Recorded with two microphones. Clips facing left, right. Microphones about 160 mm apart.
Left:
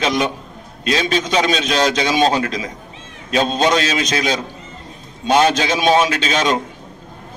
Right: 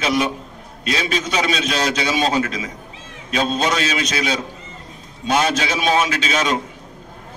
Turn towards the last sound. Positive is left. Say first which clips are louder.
# left 3 dB
turn(degrees=30)  # may be behind; listen again after turning